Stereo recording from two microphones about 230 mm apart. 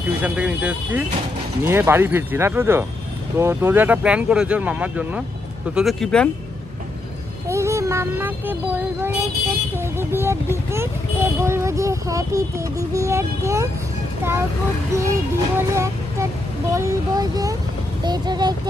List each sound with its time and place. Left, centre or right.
0.2 s speech: centre
7.4 s a sound: centre
9.9 s speech: centre
15.0 s speech: centre